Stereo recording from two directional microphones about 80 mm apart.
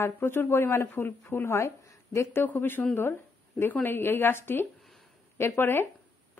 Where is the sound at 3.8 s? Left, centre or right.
Left.